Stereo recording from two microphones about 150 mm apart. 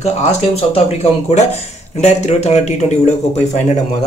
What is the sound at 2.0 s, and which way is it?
Speech, 45° left (ahead or behind).